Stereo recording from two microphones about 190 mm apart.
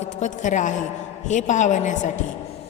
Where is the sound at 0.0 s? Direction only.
40° left (ahead or behind).